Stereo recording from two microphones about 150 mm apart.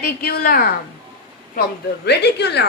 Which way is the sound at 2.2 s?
90° left.